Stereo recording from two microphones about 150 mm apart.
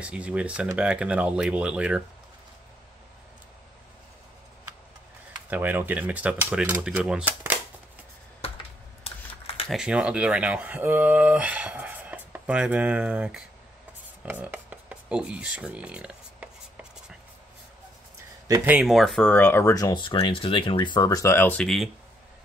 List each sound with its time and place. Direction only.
0.0 s speech: 10° right (ahead or behind)
5.5 s speech: 10° right (ahead or behind)
9.0 s computer keyboard: 40° left (ahead or behind)
9.7 s speech: 5° right (ahead or behind)
14.2 s a sound: 10° right (ahead or behind)
18.6 s speech: 10° right (ahead or behind)
18.9 s speech: centre (ahead or behind)